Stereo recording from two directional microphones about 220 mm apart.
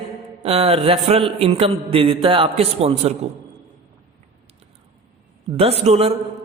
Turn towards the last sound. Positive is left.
turn(degrees=-30)  # may be behind; listen again after turning